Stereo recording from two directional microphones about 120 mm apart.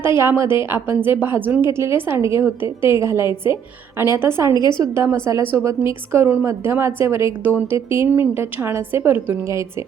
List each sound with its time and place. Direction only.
0.2 s a woman's voice: 20° right (ahead or behind)
4.5 s a woman's voice: 35° left (ahead or behind)
5.0 s a woman's voice: 20° right (ahead or behind)